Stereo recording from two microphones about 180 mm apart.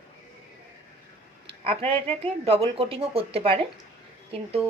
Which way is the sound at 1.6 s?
30° right (ahead or behind).